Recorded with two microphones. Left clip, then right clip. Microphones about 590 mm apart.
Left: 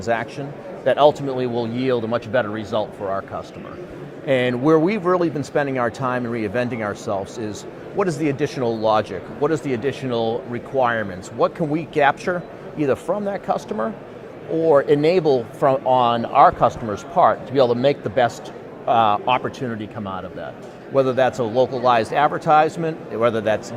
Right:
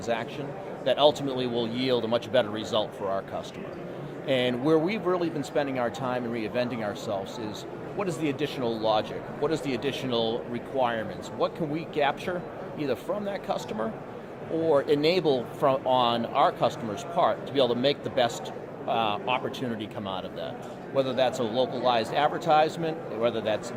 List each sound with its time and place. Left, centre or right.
0.0 s speech: left